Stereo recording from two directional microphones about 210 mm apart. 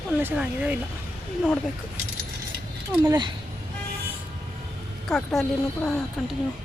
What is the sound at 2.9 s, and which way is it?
Speech, 10° right (ahead or behind).